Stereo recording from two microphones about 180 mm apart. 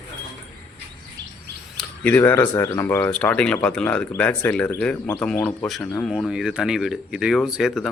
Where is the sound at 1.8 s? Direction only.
10° left (ahead or behind).